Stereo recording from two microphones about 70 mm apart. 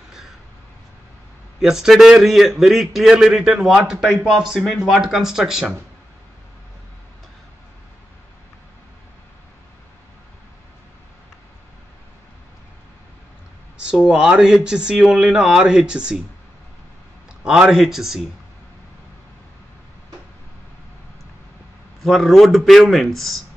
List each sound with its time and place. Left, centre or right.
1.6 s a man's voice: centre
4.6 s a man's voice: centre
4.8 s speech: centre
13.7 s speech: centre
17.4 s a man's voice: centre
22.0 s a man's voice: centre